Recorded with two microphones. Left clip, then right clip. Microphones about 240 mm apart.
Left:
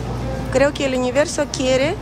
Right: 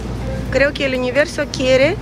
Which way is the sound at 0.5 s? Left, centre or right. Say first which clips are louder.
Right 1 dB; centre.